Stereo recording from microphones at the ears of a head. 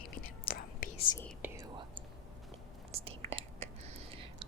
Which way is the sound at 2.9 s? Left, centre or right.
Right.